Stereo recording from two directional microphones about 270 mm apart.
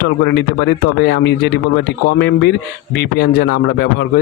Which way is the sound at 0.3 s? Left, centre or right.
Left.